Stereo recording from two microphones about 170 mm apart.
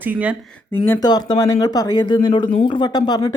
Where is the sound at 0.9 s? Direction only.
20° left (ahead or behind).